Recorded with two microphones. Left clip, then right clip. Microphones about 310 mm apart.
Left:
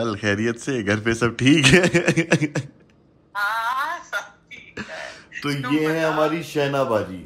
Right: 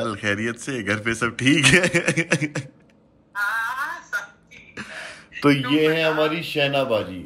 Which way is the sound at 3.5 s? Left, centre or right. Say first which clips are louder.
Left 2 dB; centre.